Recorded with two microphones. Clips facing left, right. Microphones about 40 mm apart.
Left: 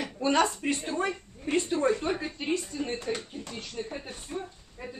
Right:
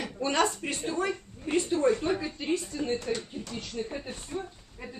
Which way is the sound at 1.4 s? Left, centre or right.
Centre.